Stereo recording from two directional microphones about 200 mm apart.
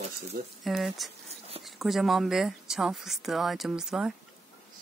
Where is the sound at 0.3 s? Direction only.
45° right (ahead or behind).